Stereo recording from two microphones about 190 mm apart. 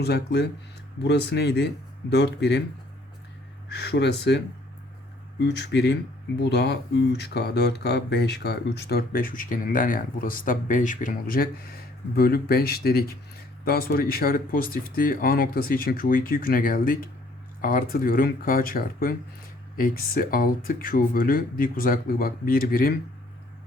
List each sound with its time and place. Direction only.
0.0 s speech: 60° left (ahead or behind)
3.7 s speech: 60° left (ahead or behind)